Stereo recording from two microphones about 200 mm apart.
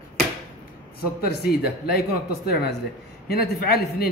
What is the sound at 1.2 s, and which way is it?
A woman's voice, 50° left (ahead or behind).